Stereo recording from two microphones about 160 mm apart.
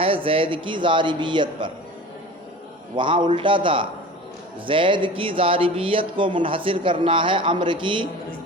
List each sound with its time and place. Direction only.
0.0 s speech: 35° right (ahead or behind)
2.9 s speech: 30° right (ahead or behind)